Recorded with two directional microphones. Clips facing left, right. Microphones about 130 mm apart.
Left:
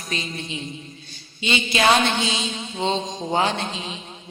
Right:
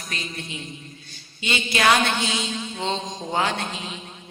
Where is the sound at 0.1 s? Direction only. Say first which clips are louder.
Left 4 dB; 25° left (ahead or behind).